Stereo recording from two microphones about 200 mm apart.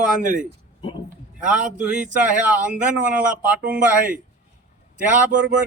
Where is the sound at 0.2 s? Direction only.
40° right (ahead or behind).